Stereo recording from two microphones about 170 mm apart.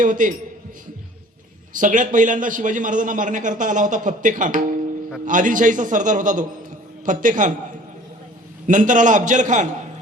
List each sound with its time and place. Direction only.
0.0 s a man's voice: 50° right (ahead or behind)
1.7 s a man's voice: 50° right (ahead or behind)
8.6 s a man's voice: 50° right (ahead or behind)